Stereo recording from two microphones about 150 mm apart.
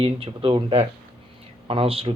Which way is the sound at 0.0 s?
35° right (ahead or behind).